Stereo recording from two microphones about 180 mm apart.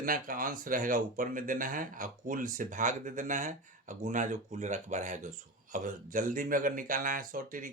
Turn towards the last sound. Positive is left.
turn(degrees=-50)  # may be behind; listen again after turning